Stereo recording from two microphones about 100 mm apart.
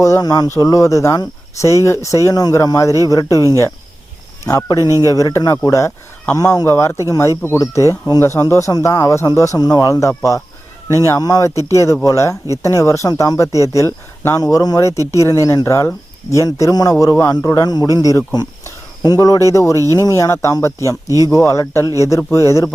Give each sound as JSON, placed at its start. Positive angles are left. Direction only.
{"t": 0.0, "sound": "speech", "side_deg": 35}
{"t": 4.4, "sound": "speech", "side_deg": 35}
{"t": 4.8, "sound": "speech", "side_deg": -30}
{"t": 5.0, "sound": "speech", "side_deg": 35}